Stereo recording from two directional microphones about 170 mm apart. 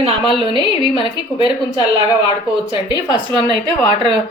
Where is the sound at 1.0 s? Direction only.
25° left (ahead or behind).